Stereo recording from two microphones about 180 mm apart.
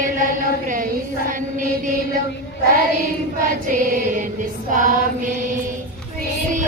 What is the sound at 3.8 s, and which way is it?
Music, 50° right (ahead or behind).